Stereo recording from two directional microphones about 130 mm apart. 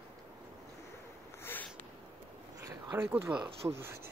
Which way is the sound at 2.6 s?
15° right (ahead or behind).